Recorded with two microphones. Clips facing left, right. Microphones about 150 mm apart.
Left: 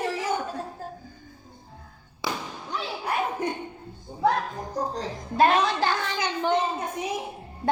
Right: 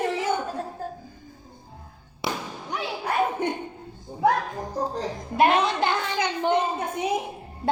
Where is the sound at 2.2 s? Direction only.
25° right (ahead or behind).